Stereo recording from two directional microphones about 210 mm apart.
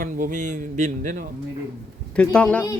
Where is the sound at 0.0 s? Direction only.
40° right (ahead or behind).